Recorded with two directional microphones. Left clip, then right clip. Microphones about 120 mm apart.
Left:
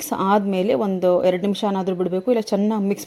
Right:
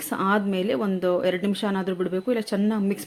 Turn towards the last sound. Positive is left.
turn(degrees=30)  # may be behind; listen again after turning